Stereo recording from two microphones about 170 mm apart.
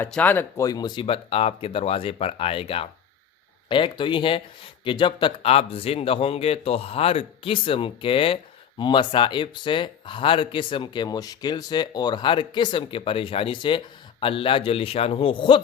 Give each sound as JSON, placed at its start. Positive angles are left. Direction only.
{"t": 0.0, "sound": "a man's voice", "side_deg": 10}